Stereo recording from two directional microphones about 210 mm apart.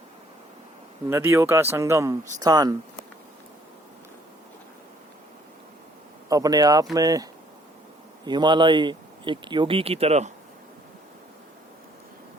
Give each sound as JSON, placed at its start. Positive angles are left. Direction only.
{"t": 1.1, "sound": "speech", "side_deg": -10}
{"t": 6.2, "sound": "speech", "side_deg": -15}